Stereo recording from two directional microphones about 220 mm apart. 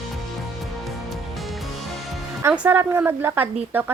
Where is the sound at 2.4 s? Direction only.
5° right (ahead or behind).